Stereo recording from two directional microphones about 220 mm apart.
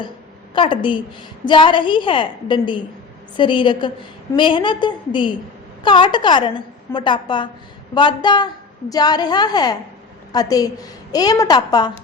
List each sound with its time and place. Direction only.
0.5 s a woman's voice: 20° left (ahead or behind)